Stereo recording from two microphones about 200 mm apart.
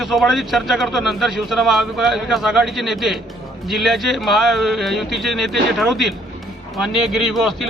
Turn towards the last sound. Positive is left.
turn(degrees=0)  # may be behind; listen again after turning